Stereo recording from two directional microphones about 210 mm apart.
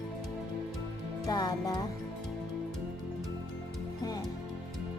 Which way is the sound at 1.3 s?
20° left (ahead or behind).